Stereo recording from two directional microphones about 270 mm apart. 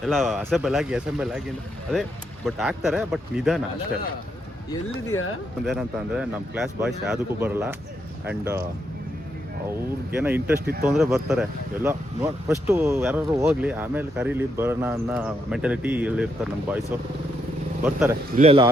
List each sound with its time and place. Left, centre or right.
0.0 s speech: centre
5.1 s speech: left
5.6 s speech: centre
10.1 s speech: centre
17.8 s speech: centre
18.3 s speech: centre